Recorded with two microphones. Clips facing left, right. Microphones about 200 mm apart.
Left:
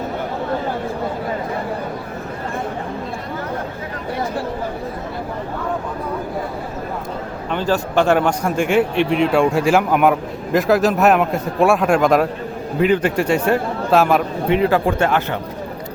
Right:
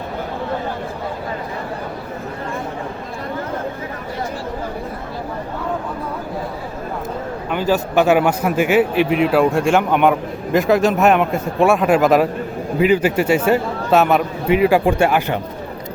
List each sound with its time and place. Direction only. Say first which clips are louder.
7.5 s a man's voice: right 1 dB; 5° right (ahead or behind)